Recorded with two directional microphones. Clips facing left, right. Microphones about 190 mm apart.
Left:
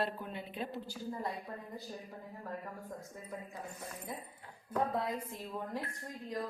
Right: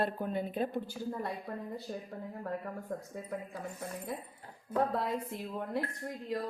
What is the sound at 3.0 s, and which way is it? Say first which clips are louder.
Speech: right 5 dB; 65° right (ahead or behind).